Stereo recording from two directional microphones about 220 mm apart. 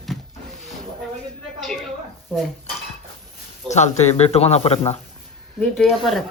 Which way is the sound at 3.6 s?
30° left (ahead or behind).